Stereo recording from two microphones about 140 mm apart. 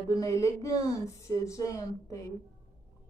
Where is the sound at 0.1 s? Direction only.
25° left (ahead or behind).